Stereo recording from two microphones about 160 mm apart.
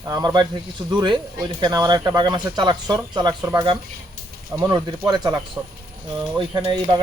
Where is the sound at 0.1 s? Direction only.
25° right (ahead or behind).